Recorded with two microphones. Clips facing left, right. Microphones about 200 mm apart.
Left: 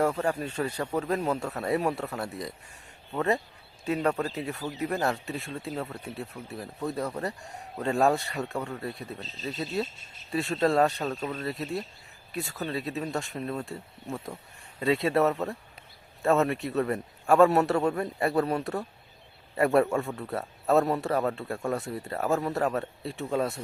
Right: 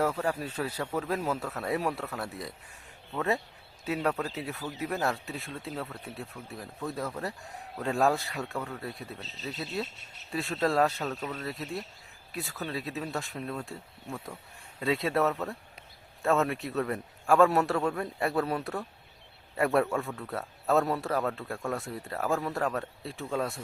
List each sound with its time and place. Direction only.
0.2 s a man's voice: 5° right (ahead or behind)
9.9 s speech: 70° right (ahead or behind)
10.3 s a man's voice: centre (ahead or behind)
11.0 s speech: 15° left (ahead or behind)
11.4 s a man's voice: centre (ahead or behind)
20.1 s speech: 15° left (ahead or behind)
20.7 s a man's voice: centre (ahead or behind)
22.3 s speech: 20° left (ahead or behind)
22.5 s a man's voice: centre (ahead or behind)